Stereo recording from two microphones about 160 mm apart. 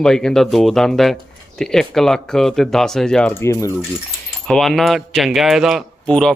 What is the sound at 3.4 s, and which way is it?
Speech, 15° left (ahead or behind).